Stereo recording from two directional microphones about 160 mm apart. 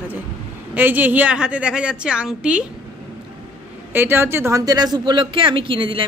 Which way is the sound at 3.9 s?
15° right (ahead or behind).